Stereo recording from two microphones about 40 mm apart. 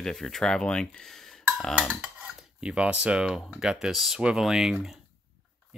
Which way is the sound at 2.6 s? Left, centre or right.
Right.